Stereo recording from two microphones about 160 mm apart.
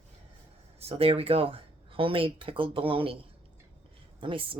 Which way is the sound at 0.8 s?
40° right (ahead or behind).